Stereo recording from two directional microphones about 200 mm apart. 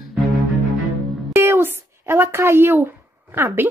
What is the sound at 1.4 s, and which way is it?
Speech, 10° right (ahead or behind).